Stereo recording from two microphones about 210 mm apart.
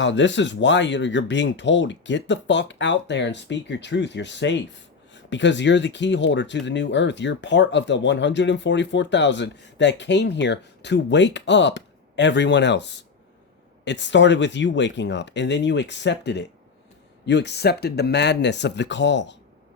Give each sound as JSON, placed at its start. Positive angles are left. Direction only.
{"t": 0.0, "sound": "speech", "side_deg": 60}